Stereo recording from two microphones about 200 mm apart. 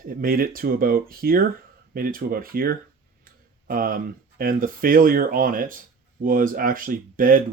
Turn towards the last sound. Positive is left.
turn(degrees=-45)  # may be behind; listen again after turning